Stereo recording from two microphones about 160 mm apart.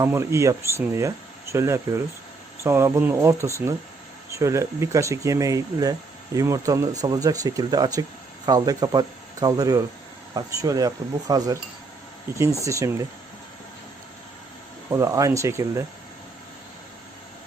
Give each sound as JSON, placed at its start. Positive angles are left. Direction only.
{"t": 0.0, "sound": "speech", "side_deg": -15}
{"t": 4.4, "sound": "speech", "side_deg": -20}
{"t": 14.8, "sound": "speech", "side_deg": -20}